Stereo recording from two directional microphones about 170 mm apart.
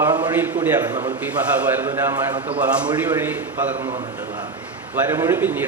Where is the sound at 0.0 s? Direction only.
25° right (ahead or behind).